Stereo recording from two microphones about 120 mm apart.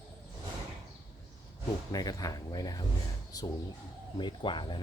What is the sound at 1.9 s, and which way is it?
Speech, 30° left (ahead or behind).